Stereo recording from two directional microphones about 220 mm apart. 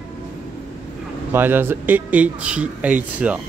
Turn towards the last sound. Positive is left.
turn(degrees=-5)  # may be behind; listen again after turning